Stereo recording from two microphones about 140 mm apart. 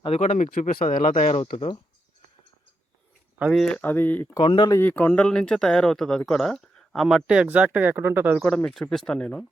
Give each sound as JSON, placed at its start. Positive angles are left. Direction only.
{"t": 0.0, "sound": "speech", "side_deg": 50}
{"t": 3.3, "sound": "speech", "side_deg": -10}
{"t": 3.6, "sound": "speech", "side_deg": 10}
{"t": 4.4, "sound": "speech", "side_deg": 35}
{"t": 4.7, "sound": "speech", "side_deg": 15}
{"t": 8.4, "sound": "speech", "side_deg": 5}